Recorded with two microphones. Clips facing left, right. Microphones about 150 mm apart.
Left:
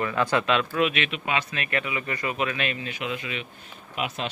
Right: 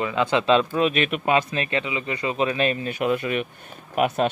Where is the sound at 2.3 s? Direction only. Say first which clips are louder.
Right 6 dB; 35° right (ahead or behind); by 4.3 s 50° right (ahead or behind).